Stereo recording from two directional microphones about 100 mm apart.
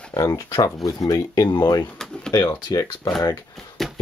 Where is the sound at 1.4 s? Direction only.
50° left (ahead or behind).